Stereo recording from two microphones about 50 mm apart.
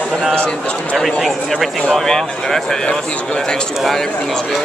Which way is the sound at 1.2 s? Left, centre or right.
Centre.